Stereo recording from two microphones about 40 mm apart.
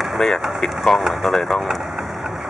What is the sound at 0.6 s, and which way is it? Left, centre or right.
Vehicle, centre.